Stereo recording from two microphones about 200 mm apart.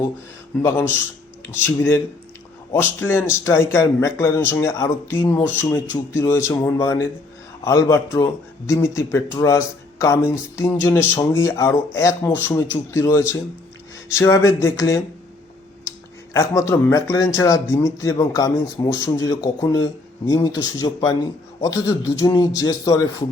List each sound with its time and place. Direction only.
0.6 s speech: 10° left (ahead or behind)
3.0 s speech: 10° left (ahead or behind)
16.3 s speech: 15° left (ahead or behind)